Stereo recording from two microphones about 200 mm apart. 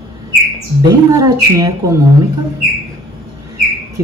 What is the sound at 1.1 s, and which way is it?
Speech, 15° right (ahead or behind).